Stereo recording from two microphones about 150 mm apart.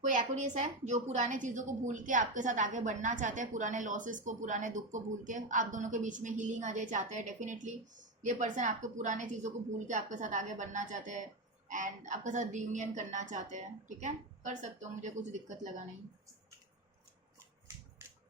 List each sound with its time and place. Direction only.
0.0 s a woman's voice: 55° right (ahead or behind)